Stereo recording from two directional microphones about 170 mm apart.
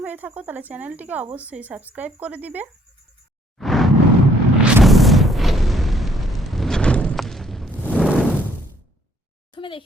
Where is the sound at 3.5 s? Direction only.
Centre (ahead or behind).